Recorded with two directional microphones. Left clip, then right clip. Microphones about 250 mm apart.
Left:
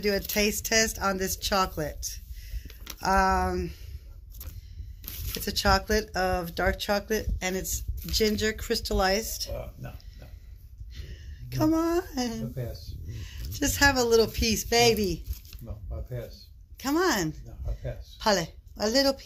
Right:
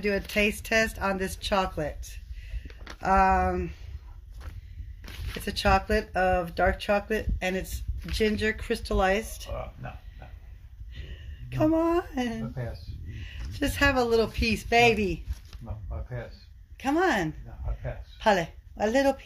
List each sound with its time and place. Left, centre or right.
0.0 s speech: centre
2.7 s a sound: left
3.0 s speech: centre
5.3 s speech: centre
10.9 s speech: centre
16.7 s a woman's voice: centre